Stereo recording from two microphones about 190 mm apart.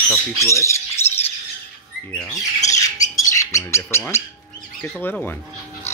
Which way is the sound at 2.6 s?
40° left (ahead or behind).